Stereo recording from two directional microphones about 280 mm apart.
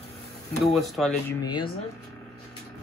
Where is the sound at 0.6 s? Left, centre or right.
Centre.